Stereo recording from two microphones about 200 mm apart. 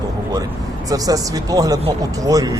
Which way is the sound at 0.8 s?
20° right (ahead or behind).